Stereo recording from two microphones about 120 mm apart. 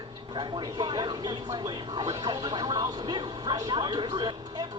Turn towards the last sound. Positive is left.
turn(degrees=-40)  # may be behind; listen again after turning